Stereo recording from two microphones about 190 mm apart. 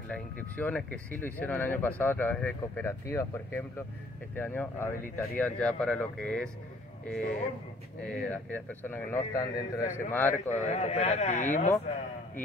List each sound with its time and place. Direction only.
0.1 s speech: 5° left (ahead or behind)
8.0 s speech: 5° left (ahead or behind)
10.5 s speech: 35° left (ahead or behind)